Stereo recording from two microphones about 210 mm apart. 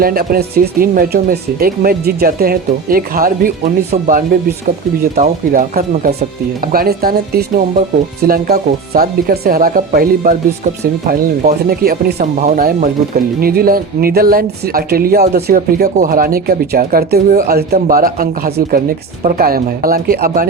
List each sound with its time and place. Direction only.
0.0 s speech: 45° right (ahead or behind)
5.1 s speech: 40° right (ahead or behind)